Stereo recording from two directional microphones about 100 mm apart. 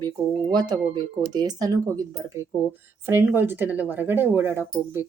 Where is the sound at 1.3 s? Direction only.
45° right (ahead or behind).